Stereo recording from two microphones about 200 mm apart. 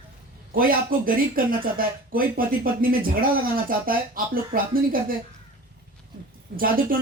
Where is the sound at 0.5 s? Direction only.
45° right (ahead or behind).